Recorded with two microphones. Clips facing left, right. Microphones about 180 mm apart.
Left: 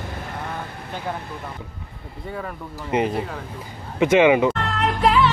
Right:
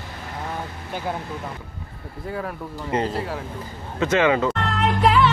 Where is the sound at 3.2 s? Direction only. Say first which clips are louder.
Even; 5° right (ahead or behind).